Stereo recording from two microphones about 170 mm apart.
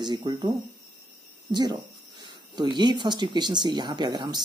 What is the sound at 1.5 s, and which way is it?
Speech, 25° right (ahead or behind).